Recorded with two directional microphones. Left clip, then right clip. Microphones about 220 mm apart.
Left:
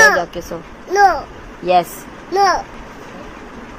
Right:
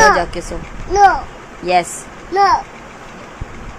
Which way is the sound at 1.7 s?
5° left (ahead or behind).